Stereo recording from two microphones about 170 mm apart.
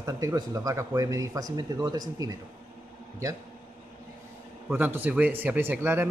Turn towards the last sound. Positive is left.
turn(degrees=-10)  # may be behind; listen again after turning